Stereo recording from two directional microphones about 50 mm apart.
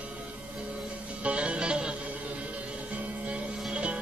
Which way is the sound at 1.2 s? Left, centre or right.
Right.